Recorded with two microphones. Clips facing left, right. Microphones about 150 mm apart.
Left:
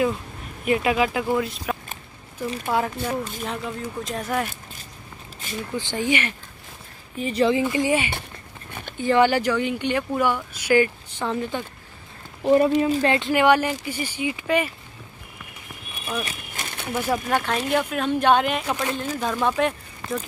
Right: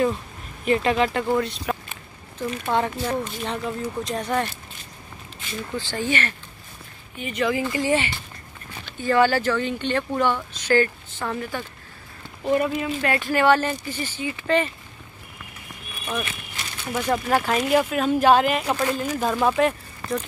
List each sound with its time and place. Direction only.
0.7 s speech: 5° left (ahead or behind)
5.8 s speech: 20° left (ahead or behind)
7.2 s speech: 35° left (ahead or behind)
7.6 s speech: 15° left (ahead or behind)
12.4 s speech: 25° left (ahead or behind)
16.3 s a sound: 50° left (ahead or behind)
16.9 s speech: 5° left (ahead or behind)